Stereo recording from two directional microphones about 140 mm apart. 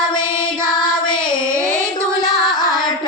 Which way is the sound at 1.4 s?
20° right (ahead or behind).